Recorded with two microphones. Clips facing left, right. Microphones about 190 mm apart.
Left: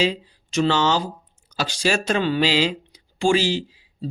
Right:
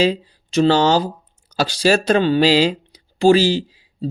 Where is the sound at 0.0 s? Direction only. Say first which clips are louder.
Right 5 dB; 35° right (ahead or behind).